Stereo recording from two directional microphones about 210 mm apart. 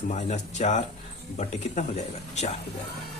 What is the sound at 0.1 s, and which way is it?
Speech, 35° left (ahead or behind).